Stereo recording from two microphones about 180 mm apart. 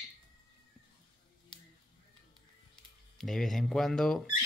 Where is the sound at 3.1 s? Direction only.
Centre (ahead or behind).